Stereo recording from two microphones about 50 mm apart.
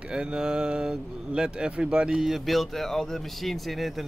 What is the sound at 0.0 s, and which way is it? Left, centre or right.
Speech, centre.